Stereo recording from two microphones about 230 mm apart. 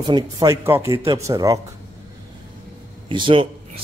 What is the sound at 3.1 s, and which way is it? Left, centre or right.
Speech, right.